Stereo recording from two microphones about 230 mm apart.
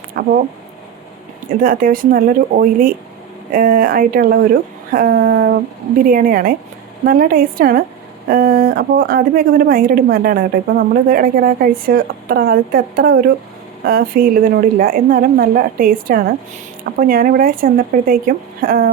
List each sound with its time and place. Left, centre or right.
0.1 s speech: right
1.5 s a woman's voice: right